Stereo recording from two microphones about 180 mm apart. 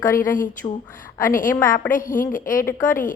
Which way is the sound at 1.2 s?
50° left (ahead or behind).